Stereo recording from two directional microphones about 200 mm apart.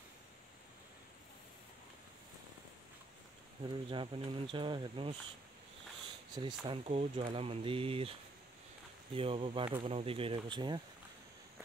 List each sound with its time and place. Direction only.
3.6 s speech: 25° right (ahead or behind)
6.3 s speech: 20° right (ahead or behind)